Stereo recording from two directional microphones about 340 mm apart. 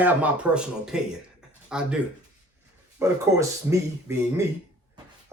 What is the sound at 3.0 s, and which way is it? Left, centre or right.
Speech, centre.